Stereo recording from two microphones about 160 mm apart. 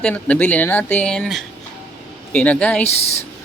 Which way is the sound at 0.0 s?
10° left (ahead or behind).